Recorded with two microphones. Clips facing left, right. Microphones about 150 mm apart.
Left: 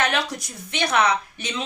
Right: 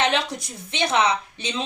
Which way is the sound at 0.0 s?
25° right (ahead or behind).